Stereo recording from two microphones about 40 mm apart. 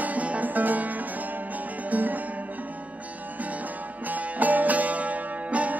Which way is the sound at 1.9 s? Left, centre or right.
Right.